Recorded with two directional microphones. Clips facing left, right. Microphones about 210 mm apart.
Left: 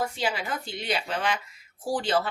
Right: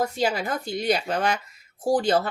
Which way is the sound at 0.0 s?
40° right (ahead or behind).